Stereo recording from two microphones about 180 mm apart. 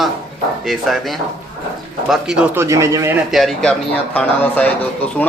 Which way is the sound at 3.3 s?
Centre (ahead or behind).